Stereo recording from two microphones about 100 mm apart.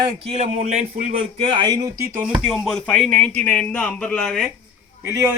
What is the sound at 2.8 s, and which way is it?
Speech, 10° left (ahead or behind).